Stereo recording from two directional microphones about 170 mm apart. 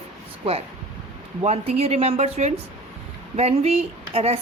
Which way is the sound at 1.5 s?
40° right (ahead or behind).